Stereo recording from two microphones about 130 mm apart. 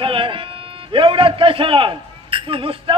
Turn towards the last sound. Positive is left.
turn(degrees=-40)  # may be behind; listen again after turning